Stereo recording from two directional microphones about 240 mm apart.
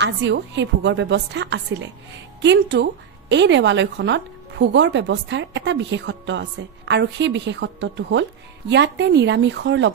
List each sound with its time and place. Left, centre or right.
0.0 s a woman's voice: right